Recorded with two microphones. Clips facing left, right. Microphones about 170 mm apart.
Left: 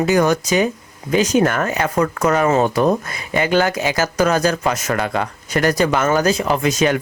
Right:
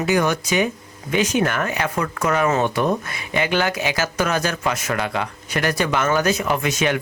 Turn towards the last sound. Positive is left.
turn(degrees=40)  # may be behind; listen again after turning